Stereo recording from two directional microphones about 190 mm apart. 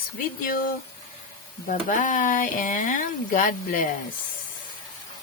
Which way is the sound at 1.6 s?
45° left (ahead or behind).